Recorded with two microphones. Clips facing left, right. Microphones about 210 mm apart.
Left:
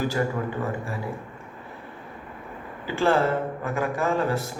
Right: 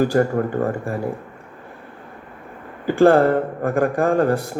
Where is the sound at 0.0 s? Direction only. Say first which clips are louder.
Right 8 dB; 50° right (ahead or behind).